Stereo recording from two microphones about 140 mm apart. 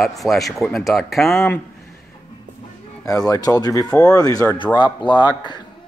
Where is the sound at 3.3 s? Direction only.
30° left (ahead or behind).